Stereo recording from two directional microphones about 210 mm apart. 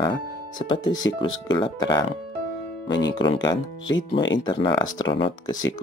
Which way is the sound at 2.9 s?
55° left (ahead or behind).